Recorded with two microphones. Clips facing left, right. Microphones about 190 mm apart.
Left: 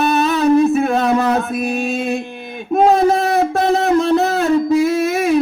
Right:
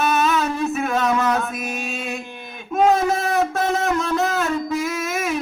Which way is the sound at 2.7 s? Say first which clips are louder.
Left 5 dB; 35° left (ahead or behind).